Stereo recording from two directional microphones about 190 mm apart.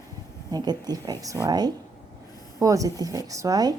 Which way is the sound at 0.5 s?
20° right (ahead or behind).